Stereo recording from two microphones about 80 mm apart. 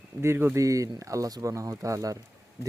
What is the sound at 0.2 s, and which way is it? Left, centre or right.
Speech, right.